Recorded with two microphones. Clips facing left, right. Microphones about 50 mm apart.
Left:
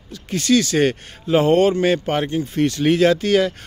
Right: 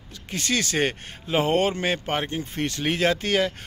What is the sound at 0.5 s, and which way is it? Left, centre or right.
Speech, right.